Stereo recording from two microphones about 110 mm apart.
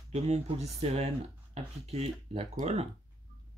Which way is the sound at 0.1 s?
85° right.